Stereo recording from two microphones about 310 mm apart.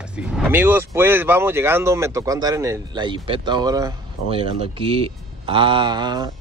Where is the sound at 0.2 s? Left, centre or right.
Centre.